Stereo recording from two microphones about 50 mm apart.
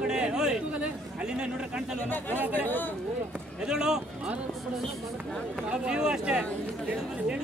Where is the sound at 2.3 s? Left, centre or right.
Right.